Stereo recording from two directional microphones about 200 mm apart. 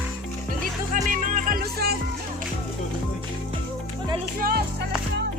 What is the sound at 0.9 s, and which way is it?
Music, 40° right (ahead or behind).